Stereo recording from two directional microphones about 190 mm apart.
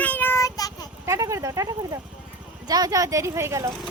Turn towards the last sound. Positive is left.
turn(degrees=-15)  # may be behind; listen again after turning